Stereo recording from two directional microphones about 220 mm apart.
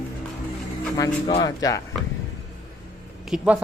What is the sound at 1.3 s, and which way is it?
Speech, 20° left (ahead or behind).